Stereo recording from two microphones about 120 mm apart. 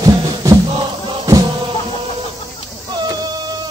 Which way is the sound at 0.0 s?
35° right (ahead or behind).